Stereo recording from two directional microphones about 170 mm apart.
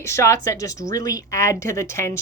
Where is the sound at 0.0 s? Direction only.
15° left (ahead or behind).